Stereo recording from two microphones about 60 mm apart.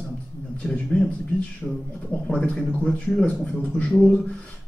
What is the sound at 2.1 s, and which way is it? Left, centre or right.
Speech, centre.